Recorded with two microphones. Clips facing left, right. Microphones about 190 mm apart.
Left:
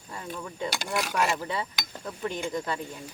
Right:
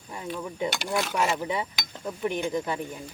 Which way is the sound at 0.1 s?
20° right (ahead or behind).